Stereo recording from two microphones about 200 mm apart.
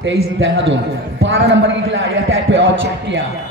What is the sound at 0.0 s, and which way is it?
A man's voice, 65° right (ahead or behind).